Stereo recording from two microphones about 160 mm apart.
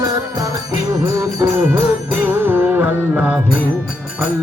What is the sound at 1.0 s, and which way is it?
Music, 20° right (ahead or behind).